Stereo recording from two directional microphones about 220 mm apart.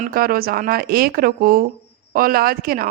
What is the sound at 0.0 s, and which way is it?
Speech, 40° right (ahead or behind).